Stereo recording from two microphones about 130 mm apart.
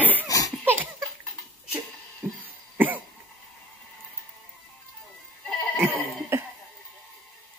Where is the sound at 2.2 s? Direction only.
10° right (ahead or behind).